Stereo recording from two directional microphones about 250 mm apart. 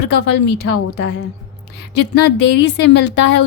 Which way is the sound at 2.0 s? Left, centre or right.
Left.